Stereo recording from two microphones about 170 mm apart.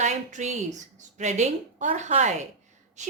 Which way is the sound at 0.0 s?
45° right (ahead or behind).